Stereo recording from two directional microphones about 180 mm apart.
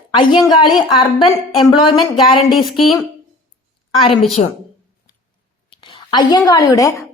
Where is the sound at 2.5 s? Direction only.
Centre (ahead or behind).